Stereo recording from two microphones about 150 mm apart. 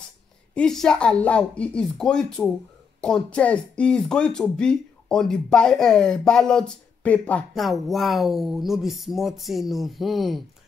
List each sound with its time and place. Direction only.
0.6 s speech: 5° left (ahead or behind)